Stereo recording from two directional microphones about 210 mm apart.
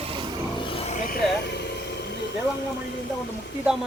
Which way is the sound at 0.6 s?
25° left (ahead or behind).